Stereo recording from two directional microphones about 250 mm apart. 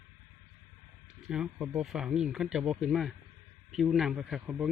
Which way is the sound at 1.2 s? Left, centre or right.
Centre.